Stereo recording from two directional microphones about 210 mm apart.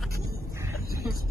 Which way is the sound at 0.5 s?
15° right (ahead or behind).